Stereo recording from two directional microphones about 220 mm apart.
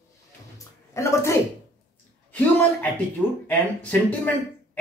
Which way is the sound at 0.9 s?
15° left (ahead or behind).